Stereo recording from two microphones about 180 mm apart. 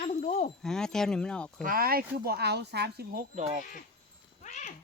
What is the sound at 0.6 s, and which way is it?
Speech, 5° left (ahead or behind).